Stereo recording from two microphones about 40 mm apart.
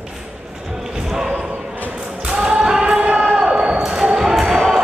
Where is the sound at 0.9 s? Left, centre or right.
Centre.